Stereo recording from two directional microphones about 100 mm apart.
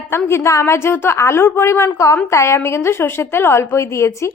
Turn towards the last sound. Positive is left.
turn(degrees=30)  # may be behind; listen again after turning